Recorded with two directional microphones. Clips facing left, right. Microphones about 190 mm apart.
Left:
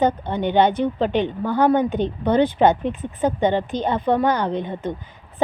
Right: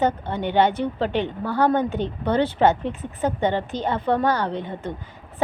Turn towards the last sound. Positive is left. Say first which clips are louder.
# left 3 dB
turn(degrees=20)  # may be behind; listen again after turning